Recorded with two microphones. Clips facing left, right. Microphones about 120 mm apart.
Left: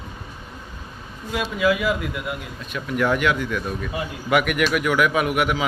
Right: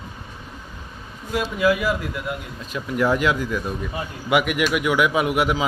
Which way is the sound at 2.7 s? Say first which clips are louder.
Right 1 dB; 20° right (ahead or behind).